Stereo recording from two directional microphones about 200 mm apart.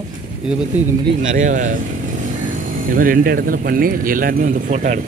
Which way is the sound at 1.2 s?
40° right (ahead or behind).